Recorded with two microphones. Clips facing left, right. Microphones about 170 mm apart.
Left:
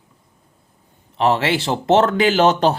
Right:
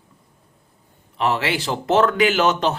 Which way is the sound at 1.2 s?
30° left (ahead or behind).